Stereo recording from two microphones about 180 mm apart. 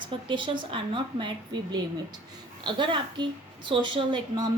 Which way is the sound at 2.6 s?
25° right (ahead or behind).